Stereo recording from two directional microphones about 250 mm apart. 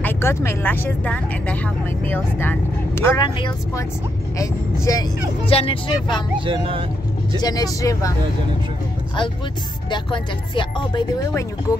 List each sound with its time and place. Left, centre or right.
0.0 s speech: centre
6.4 s speech: right
7.3 s speech: centre
9.8 s speech: centre